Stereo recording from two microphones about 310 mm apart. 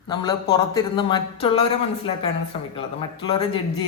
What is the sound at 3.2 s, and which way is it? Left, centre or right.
Speech, centre.